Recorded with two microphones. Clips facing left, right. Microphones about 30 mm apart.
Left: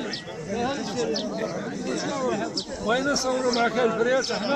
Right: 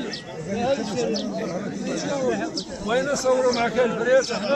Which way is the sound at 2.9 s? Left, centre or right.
Centre.